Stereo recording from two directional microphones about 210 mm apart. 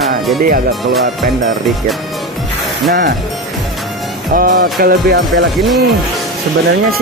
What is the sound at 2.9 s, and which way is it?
Music, 45° right (ahead or behind).